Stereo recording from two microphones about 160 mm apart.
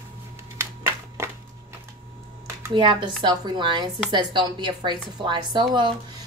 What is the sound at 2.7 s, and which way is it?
A woman's voice, 30° right (ahead or behind).